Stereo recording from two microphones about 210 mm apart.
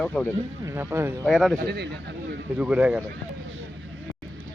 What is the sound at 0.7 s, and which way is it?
Speech, 10° right (ahead or behind).